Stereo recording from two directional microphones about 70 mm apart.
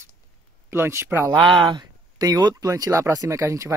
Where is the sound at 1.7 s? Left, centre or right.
Right.